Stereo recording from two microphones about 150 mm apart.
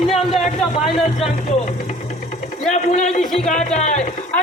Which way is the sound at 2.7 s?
50° left (ahead or behind).